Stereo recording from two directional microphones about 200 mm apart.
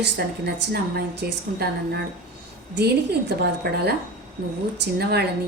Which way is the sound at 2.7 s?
55° right (ahead or behind).